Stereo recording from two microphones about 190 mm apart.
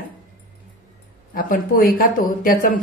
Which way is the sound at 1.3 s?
45° left (ahead or behind).